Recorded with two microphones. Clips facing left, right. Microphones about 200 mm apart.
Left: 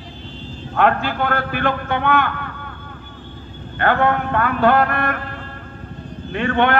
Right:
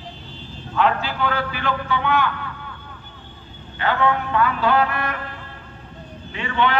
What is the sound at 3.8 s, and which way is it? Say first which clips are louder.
A man's voice: left 3 dB; 55° left (ahead or behind).